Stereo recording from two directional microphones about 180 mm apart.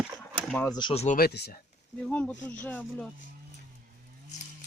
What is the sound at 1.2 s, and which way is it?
Speech, 65° left (ahead or behind).